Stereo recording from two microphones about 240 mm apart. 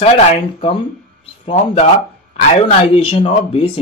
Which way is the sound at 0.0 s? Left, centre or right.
Left.